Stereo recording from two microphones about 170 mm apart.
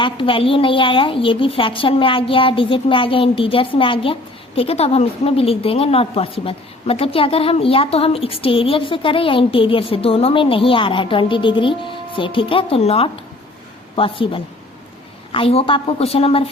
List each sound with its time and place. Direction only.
0.0 s a woman's voice: 30° left (ahead or behind)